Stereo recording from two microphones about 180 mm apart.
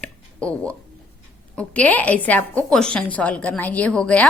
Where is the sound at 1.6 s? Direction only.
10° left (ahead or behind).